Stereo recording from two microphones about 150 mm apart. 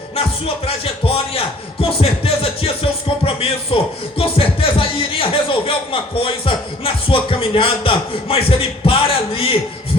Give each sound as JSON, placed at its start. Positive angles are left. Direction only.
{"t": 0.2, "sound": "speech", "side_deg": 40}